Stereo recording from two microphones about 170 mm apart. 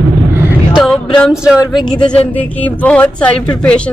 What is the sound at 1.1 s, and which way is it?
Speech, centre (ahead or behind).